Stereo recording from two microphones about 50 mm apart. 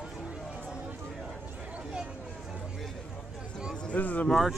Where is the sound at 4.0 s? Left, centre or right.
Left.